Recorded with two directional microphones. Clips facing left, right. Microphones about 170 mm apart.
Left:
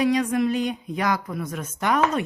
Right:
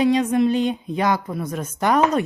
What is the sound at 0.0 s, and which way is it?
A woman's voice, 25° right (ahead or behind).